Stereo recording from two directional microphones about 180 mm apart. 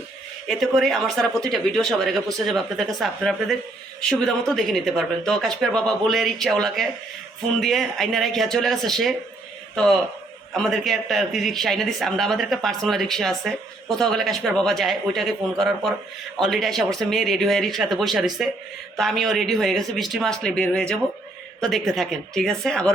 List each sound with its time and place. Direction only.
0.4 s speech: centre (ahead or behind)